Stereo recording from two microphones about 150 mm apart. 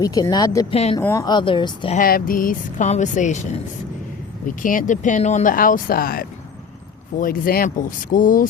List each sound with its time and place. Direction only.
0.0 s speech: 25° left (ahead or behind)
0.7 s speech: 45° left (ahead or behind)
0.9 s speech: 20° left (ahead or behind)
2.0 s speech: 75° left (ahead or behind); by 3.4 s 55° left (ahead or behind)
4.6 s speech: 65° left (ahead or behind)